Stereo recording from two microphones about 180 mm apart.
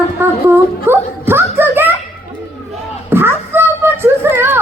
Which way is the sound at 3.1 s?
10° right (ahead or behind).